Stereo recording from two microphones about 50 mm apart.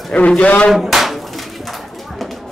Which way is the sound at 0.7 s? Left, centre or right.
Centre.